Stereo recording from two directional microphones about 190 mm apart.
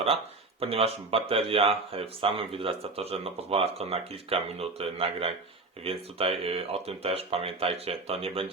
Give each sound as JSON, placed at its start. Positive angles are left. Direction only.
{"t": 0.6, "sound": "speech", "side_deg": -30}